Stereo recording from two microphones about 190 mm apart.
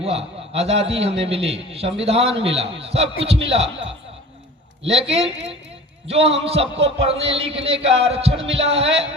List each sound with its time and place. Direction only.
0.0 s a man's voice: 30° right (ahead or behind)